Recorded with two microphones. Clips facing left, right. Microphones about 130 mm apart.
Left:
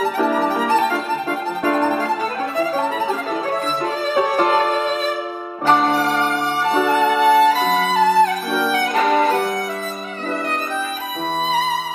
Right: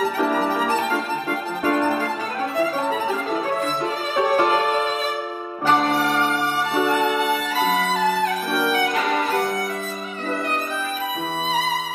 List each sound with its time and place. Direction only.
0.0 s violin: 10° left (ahead or behind)
1.6 s music: 35° left (ahead or behind)
5.9 s music: 10° left (ahead or behind)
7.2 s music: 40° left (ahead or behind)